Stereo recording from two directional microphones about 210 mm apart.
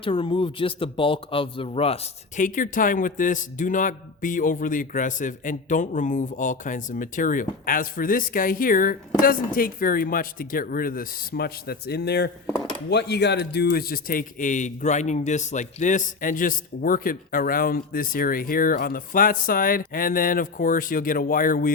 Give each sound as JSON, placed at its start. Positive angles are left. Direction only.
{"t": 0.0, "sound": "a man's voice", "side_deg": 25}